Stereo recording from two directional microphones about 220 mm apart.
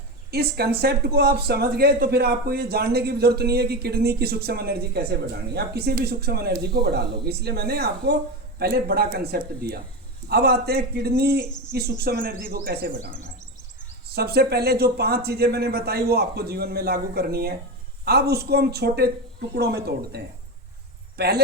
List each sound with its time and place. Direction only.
0.3 s speech: 45° right (ahead or behind)
14.1 s speech: 45° right (ahead or behind)